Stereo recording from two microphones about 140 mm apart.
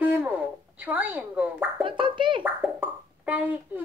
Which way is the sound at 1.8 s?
35° right (ahead or behind).